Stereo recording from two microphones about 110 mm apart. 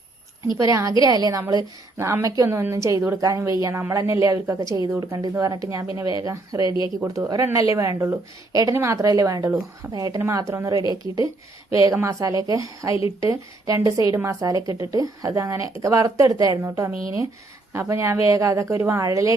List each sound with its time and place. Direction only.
0.6 s a woman's voice: 35° right (ahead or behind)
9.9 s a woman's voice: 35° right (ahead or behind)